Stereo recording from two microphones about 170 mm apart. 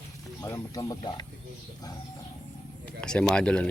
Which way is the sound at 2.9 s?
5° left (ahead or behind).